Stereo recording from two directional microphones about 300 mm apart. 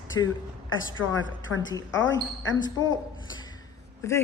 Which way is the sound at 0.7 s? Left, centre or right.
Left.